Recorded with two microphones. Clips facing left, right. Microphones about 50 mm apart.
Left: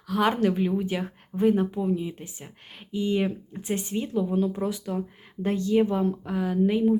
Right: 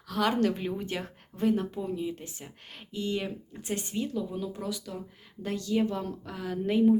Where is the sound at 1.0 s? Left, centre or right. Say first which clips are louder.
Left 5 dB; centre.